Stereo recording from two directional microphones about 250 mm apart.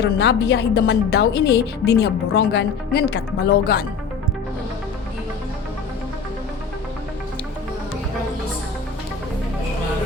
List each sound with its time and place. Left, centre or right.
0.0 s a woman's voice: left